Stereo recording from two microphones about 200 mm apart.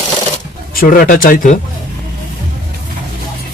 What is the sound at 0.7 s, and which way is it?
Speech, 45° left (ahead or behind).